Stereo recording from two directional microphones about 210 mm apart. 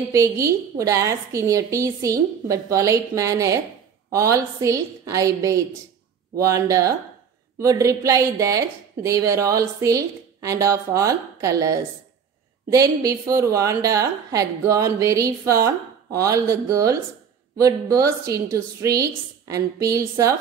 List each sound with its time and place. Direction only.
0.1 s a woman's voice: 15° right (ahead or behind)